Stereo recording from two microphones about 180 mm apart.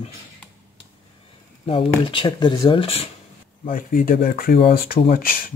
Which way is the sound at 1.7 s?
30° left (ahead or behind).